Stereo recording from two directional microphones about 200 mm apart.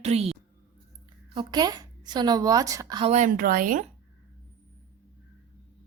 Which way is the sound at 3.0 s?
35° right (ahead or behind).